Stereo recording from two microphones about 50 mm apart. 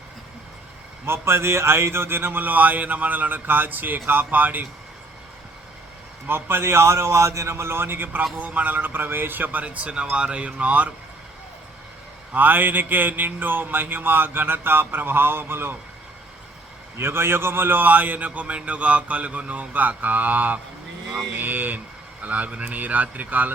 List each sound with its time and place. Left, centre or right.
1.0 s speech: right
6.2 s a man's voice: right
8.4 s speech: right
12.3 s a sound: right
17.0 s speech: right